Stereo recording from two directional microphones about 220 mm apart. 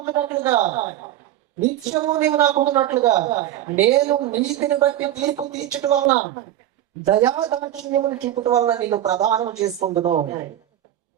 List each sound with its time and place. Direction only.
0.0 s a woman's voice: 15° right (ahead or behind)
7.1 s a woman's voice: 15° right (ahead or behind)
10.0 s speech: 30° right (ahead or behind)